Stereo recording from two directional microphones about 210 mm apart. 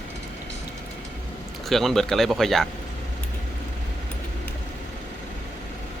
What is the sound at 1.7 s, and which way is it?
Speech, centre (ahead or behind).